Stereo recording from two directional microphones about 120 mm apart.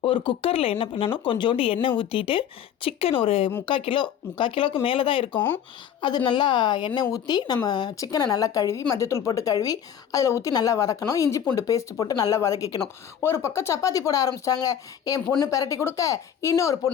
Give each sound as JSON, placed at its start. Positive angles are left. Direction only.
{"t": 0.0, "sound": "a woman's voice", "side_deg": 45}